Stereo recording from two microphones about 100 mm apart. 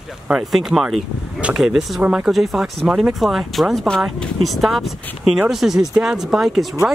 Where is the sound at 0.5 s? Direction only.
Centre (ahead or behind).